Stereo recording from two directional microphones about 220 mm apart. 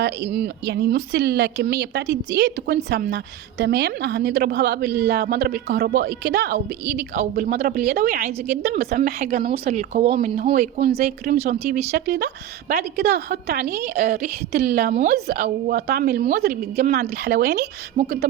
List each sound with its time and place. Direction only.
0.0 s a woman's voice: 50° right (ahead or behind); by 14.2 s 30° right (ahead or behind)
14.5 s speech: 45° right (ahead or behind)
16.7 s a woman's voice: 35° right (ahead or behind)
17.0 s speech: 45° right (ahead or behind)
17.9 s a woman's voice: 35° right (ahead or behind)